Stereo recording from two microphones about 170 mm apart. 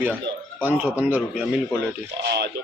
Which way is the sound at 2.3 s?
80° right.